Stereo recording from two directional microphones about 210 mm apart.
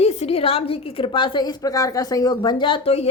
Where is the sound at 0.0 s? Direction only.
30° left (ahead or behind).